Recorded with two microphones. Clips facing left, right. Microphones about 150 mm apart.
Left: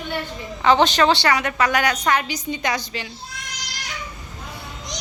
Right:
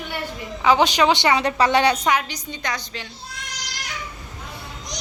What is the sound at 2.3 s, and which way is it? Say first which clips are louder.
Speech: left 5 dB; 5° left (ahead or behind).